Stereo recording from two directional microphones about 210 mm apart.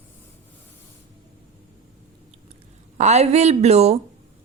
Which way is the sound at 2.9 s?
30° right (ahead or behind).